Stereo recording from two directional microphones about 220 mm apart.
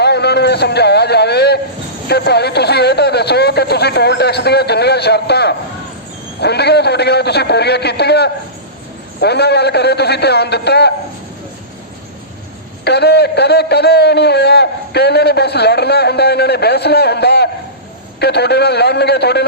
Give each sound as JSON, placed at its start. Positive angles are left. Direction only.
{"t": 0.0, "sound": "a man's voice", "side_deg": 50}
{"t": 12.8, "sound": "a man's voice", "side_deg": 50}